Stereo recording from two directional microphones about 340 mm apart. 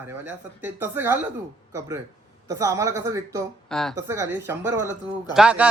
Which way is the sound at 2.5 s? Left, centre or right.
Centre.